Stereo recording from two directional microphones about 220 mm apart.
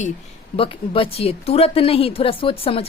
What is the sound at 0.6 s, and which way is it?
A woman's voice, 25° left (ahead or behind).